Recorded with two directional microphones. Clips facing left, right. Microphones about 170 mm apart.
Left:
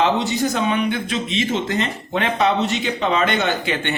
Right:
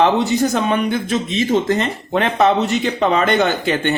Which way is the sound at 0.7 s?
45° right (ahead or behind).